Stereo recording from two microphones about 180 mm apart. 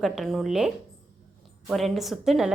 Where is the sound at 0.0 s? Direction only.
Centre (ahead or behind).